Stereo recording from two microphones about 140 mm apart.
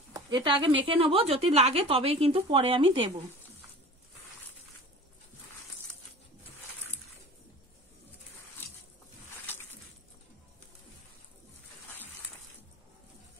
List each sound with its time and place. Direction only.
0.1 s speech: 30° right (ahead or behind)